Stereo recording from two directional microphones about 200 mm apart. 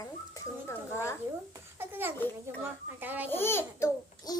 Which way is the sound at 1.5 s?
10° right (ahead or behind).